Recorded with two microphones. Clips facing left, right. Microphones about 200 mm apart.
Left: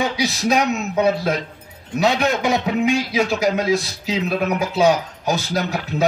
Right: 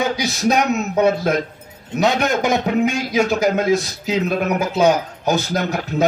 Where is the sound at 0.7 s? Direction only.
40° right (ahead or behind).